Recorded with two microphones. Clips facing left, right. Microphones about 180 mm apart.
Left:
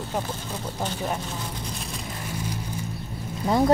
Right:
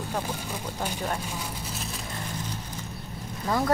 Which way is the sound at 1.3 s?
5° right (ahead or behind).